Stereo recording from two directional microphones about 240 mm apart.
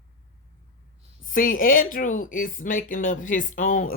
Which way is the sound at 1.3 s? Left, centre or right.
Left.